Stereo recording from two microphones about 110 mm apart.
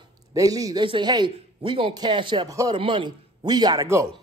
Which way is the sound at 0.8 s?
45° right (ahead or behind).